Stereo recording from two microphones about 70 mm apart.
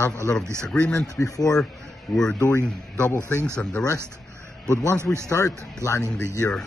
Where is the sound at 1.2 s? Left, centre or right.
Left.